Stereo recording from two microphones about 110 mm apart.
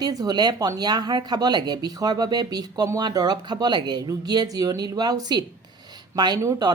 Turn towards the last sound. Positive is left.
turn(degrees=-30)  # may be behind; listen again after turning